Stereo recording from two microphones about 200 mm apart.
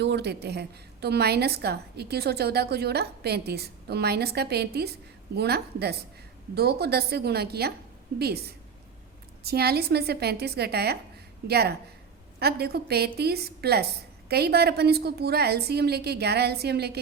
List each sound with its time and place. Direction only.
0.0 s a woman's voice: 55° right (ahead or behind)